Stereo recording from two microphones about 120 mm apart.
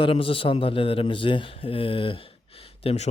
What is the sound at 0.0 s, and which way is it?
A man's voice, 50° left (ahead or behind).